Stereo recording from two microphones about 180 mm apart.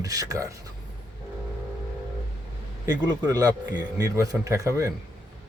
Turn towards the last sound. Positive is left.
turn(degrees=-20)  # may be behind; listen again after turning